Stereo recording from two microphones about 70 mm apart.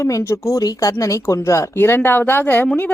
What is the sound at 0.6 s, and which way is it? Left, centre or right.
A woman's voice, left.